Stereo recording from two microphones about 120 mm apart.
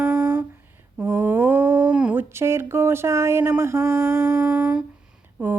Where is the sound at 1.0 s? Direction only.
20° right (ahead or behind).